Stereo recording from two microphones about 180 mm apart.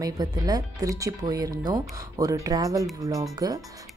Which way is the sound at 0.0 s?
20° right (ahead or behind).